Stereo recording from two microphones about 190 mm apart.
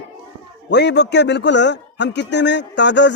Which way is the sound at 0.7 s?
65° left (ahead or behind).